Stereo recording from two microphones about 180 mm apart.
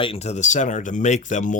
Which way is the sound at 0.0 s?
35° left (ahead or behind).